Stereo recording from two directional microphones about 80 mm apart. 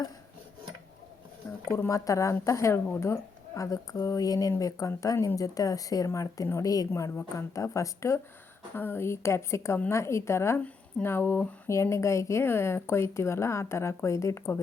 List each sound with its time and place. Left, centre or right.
1.7 s a woman's voice: left
11.7 s speech: left